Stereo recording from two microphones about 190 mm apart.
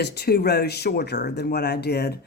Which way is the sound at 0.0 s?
60° left (ahead or behind).